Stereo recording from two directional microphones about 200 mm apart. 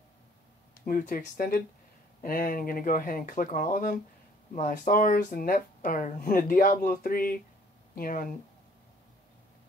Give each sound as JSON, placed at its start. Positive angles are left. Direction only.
{"t": 0.8, "sound": "speech", "side_deg": 45}